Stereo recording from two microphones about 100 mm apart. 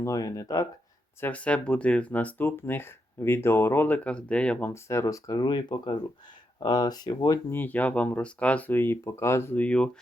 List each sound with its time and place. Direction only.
0.0 s speech: 35° left (ahead or behind)
1.2 s speech: 15° left (ahead or behind)
4.7 s speech: 30° left (ahead or behind)
7.5 s speech: 15° left (ahead or behind)